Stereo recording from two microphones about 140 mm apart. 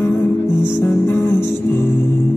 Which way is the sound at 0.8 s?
15° left (ahead or behind).